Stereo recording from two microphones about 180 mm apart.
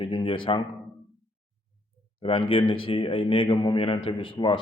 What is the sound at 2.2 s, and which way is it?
A man's voice, 30° left (ahead or behind).